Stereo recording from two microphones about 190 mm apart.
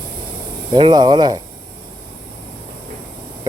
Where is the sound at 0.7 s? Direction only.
20° right (ahead or behind).